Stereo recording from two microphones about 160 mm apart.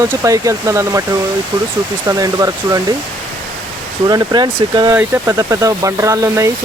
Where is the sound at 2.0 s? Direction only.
20° right (ahead or behind).